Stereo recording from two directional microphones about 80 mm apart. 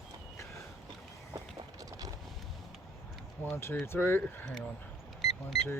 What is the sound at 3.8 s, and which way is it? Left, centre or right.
Speech, left.